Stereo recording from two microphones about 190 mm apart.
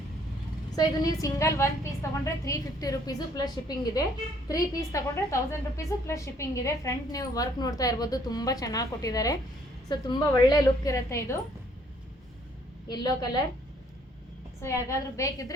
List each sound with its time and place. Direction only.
0.8 s a woman's voice: 20° left (ahead or behind)
12.9 s a woman's voice: 20° left (ahead or behind)
14.6 s a woman's voice: 15° left (ahead or behind)